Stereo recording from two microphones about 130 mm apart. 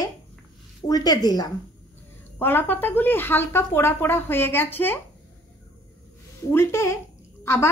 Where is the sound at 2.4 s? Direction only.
15° left (ahead or behind).